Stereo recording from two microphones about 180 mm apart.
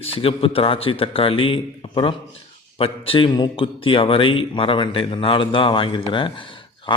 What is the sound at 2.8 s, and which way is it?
A man's voice, 30° left (ahead or behind).